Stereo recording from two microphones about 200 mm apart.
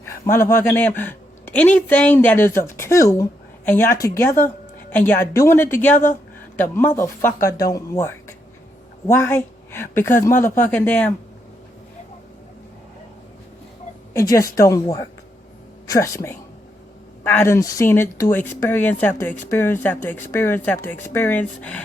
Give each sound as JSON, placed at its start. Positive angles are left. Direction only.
{"t": 0.0, "sound": "a woman's voice", "side_deg": 10}
{"t": 14.1, "sound": "speech", "side_deg": 15}